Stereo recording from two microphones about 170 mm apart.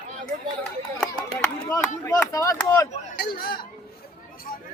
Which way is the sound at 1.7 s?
15° left (ahead or behind).